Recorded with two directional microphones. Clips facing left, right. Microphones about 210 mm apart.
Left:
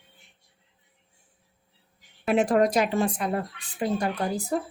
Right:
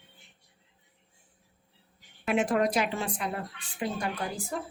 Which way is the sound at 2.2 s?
35° left (ahead or behind).